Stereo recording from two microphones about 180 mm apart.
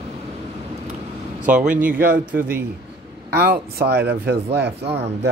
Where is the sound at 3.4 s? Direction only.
60° right (ahead or behind).